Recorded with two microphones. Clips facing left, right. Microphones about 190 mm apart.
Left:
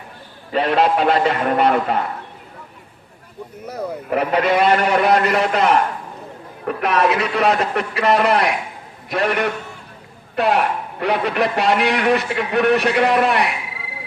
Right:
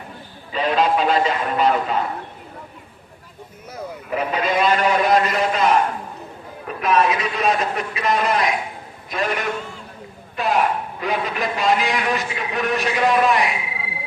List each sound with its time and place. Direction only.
0.5 s a man's voice: 65° left (ahead or behind)
3.7 s a man's voice: 65° left (ahead or behind)